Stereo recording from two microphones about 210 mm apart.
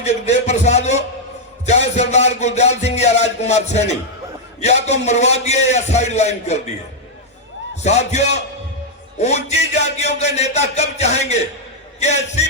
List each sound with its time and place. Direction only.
0.0 s music: 30° left (ahead or behind)
7.8 s music: 30° left (ahead or behind)